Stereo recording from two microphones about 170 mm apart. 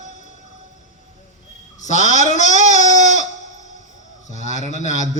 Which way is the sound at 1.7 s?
45° left (ahead or behind).